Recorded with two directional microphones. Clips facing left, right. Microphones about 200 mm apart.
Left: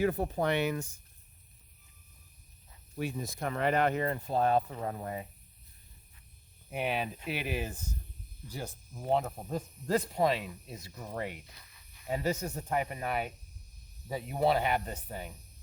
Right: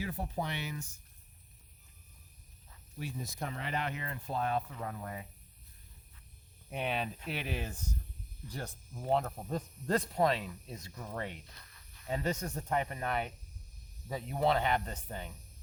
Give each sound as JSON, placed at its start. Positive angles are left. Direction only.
{"t": 0.0, "sound": "speech", "side_deg": 55}
{"t": 2.9, "sound": "speech", "side_deg": 60}
{"t": 6.7, "sound": "speech", "side_deg": 5}